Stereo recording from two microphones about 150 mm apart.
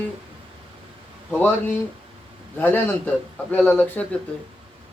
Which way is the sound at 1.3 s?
10° left (ahead or behind).